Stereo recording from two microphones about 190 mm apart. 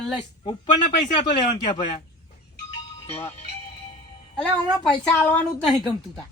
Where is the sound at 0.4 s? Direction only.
25° left (ahead or behind).